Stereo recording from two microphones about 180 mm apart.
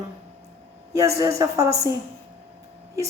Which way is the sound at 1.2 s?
20° right (ahead or behind).